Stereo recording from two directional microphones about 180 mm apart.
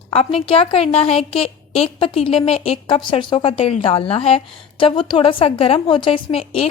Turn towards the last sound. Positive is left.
turn(degrees=30)  # may be behind; listen again after turning